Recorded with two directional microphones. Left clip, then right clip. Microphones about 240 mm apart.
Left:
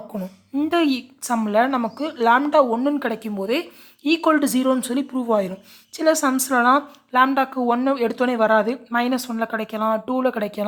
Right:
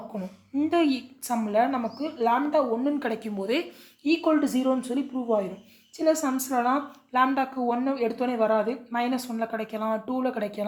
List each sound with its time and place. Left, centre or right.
0.1 s a woman's voice: left